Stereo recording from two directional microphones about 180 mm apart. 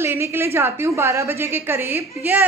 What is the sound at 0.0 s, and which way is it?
A woman's voice, 15° right (ahead or behind).